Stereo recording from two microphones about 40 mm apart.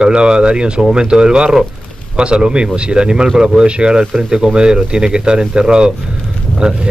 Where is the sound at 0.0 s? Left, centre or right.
Right.